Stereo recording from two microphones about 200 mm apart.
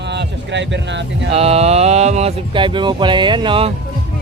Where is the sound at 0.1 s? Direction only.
60° right (ahead or behind).